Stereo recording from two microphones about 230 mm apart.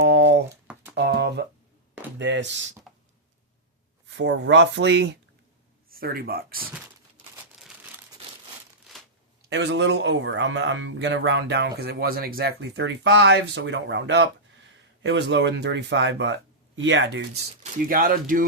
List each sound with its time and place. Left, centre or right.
0.0 s a sound: right
2.1 s speech: right
4.1 s speech: right
9.5 s speech: right
17.6 s speech: right